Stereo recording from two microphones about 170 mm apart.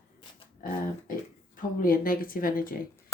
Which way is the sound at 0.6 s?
55° left (ahead or behind).